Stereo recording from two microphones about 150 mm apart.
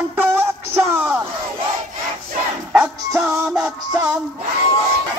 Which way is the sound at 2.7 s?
10° right (ahead or behind).